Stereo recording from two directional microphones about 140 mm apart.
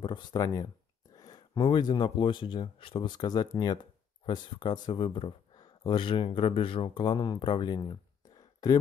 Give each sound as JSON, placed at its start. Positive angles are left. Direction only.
{"t": 0.0, "sound": "speech", "side_deg": 30}